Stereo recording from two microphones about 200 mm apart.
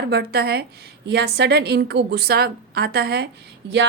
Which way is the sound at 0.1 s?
55° right (ahead or behind).